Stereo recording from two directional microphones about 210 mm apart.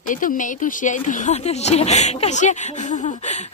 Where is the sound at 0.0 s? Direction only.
40° left (ahead or behind).